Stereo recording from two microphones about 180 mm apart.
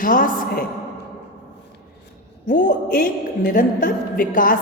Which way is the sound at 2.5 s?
45° left (ahead or behind).